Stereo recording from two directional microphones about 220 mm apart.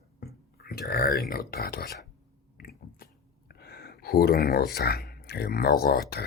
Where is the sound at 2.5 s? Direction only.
40° left (ahead or behind).